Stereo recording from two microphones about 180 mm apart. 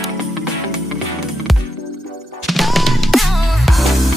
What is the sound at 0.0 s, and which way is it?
Music, centre (ahead or behind).